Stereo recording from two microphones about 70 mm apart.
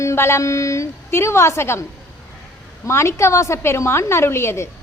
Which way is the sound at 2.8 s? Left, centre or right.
Left.